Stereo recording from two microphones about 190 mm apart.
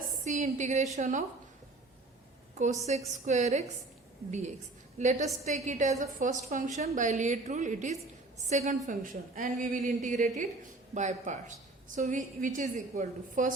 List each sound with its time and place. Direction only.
0.3 s a woman's voice: 40° right (ahead or behind)
2.6 s a woman's voice: 35° right (ahead or behind)